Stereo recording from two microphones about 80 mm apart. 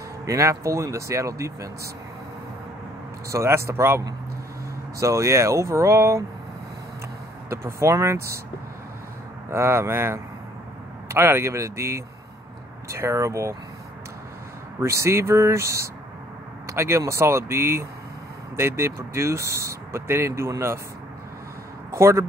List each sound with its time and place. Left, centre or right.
0.2 s speech: right
3.3 s speech: right
5.0 s speech: right
7.4 s speech: right
9.5 s speech: right
14.8 s speech: right
21.9 s speech: right